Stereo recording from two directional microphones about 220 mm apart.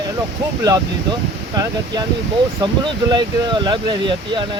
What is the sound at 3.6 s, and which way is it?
Speech, 20° right (ahead or behind).